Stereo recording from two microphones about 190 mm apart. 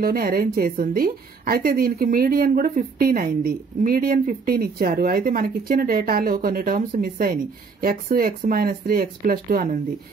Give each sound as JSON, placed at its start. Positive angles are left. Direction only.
{"t": 0.0, "sound": "a woman's voice", "side_deg": -50}